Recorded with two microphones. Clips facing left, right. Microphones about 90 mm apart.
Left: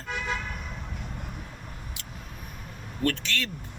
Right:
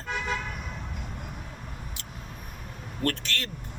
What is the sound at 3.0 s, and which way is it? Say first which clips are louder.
Speech: left 2 dB; 45° right (ahead or behind).